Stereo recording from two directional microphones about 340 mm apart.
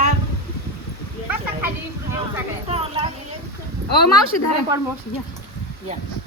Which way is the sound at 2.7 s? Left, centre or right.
Centre.